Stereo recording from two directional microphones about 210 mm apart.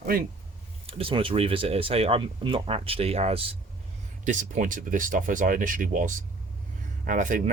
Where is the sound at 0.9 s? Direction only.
25° right (ahead or behind).